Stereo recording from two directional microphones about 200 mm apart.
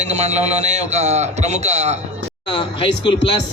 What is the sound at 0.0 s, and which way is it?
A man's voice, 35° right (ahead or behind).